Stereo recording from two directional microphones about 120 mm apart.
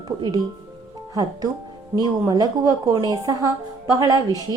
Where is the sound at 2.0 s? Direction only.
35° right (ahead or behind).